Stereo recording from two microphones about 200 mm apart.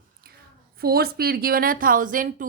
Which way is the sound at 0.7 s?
50° right (ahead or behind).